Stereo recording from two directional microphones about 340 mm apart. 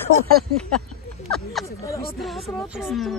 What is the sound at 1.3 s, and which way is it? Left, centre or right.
Speech, centre.